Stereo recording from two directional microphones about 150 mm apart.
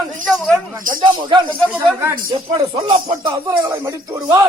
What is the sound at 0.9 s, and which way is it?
Speech, 30° right (ahead or behind).